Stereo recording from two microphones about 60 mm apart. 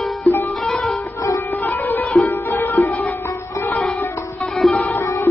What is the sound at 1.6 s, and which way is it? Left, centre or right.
Music, left.